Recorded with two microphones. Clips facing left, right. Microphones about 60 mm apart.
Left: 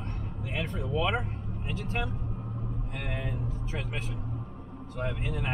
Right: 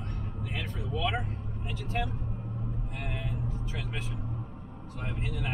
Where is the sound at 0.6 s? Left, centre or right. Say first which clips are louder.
Left 4 dB; left.